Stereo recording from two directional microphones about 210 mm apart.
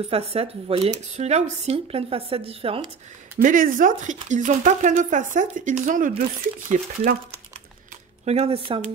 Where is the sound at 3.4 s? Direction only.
40° right (ahead or behind).